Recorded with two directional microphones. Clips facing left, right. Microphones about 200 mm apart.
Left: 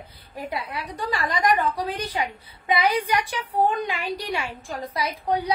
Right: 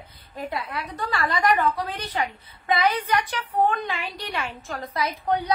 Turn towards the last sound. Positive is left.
turn(degrees=15)  # may be behind; listen again after turning